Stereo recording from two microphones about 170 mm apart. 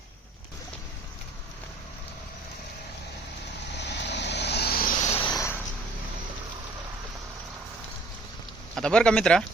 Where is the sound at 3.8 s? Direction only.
90° left; by 5.0 s 60° left (ahead or behind).